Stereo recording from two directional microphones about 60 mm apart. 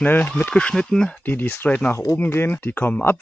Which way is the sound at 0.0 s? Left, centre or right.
Left.